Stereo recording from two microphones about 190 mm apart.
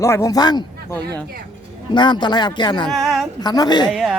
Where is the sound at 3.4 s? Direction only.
20° left (ahead or behind).